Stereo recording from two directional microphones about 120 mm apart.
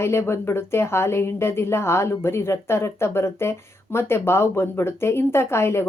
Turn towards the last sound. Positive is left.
turn(degrees=20)  # may be behind; listen again after turning